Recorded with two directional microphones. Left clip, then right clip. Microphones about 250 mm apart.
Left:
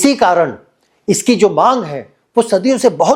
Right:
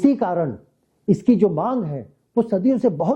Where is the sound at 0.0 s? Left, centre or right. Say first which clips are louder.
Left 9 dB; centre.